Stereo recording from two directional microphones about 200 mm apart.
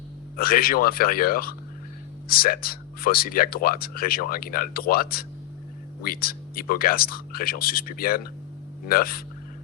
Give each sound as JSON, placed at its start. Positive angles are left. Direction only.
{"t": 0.3, "sound": "speech", "side_deg": 45}